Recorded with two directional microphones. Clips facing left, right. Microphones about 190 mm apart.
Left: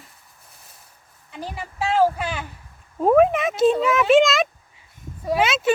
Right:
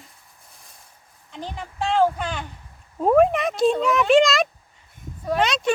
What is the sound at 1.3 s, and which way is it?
Speech, 5° left (ahead or behind).